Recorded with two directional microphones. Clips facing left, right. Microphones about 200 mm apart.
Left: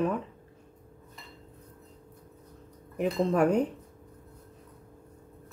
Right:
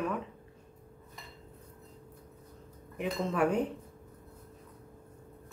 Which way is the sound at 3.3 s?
40° left (ahead or behind).